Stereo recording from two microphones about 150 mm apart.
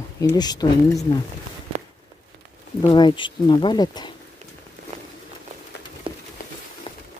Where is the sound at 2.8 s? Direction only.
30° left (ahead or behind).